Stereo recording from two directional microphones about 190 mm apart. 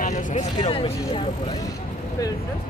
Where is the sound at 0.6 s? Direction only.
30° left (ahead or behind).